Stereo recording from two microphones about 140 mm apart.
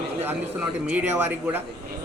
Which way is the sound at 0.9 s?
15° right (ahead or behind).